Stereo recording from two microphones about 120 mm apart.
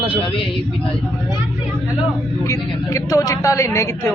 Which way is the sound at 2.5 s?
30° left (ahead or behind).